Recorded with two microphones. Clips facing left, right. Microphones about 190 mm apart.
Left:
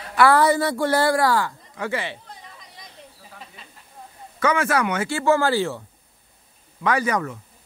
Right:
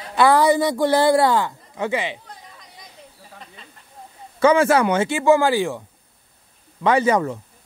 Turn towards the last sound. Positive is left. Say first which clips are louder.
# right 5 dB
turn(degrees=-25)  # may be behind; listen again after turning